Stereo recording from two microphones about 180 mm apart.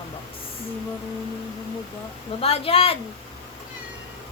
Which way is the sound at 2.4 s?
30° left (ahead or behind).